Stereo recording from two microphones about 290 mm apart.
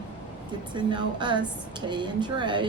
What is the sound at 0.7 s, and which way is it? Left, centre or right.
Speech, centre.